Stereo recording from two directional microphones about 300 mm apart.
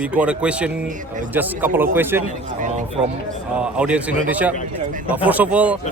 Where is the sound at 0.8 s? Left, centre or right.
Right.